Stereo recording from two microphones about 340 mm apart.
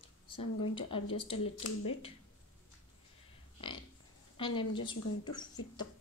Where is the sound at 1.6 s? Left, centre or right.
Left.